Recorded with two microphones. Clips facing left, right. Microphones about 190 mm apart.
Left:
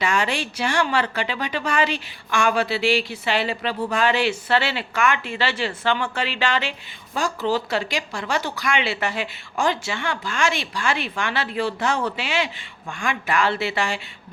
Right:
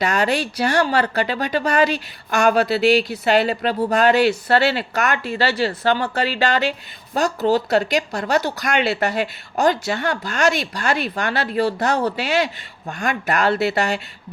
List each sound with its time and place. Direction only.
0.0 s a woman's voice: 40° right (ahead or behind)